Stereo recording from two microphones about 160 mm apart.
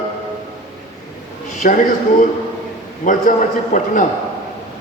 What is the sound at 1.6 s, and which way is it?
A man's voice, 55° left (ahead or behind).